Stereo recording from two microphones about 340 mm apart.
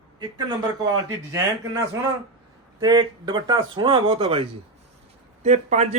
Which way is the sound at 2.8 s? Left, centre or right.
Centre.